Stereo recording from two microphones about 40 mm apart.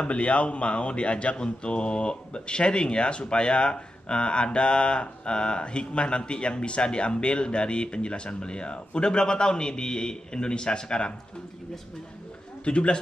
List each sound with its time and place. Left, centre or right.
0.0 s a man's voice: left
12.6 s speech: left